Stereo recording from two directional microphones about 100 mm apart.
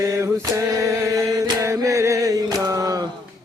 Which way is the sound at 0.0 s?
30° right (ahead or behind).